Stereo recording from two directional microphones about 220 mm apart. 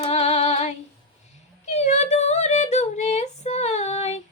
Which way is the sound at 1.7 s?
30° left (ahead or behind).